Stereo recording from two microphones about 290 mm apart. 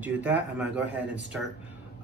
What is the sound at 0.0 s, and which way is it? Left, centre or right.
Speech, centre.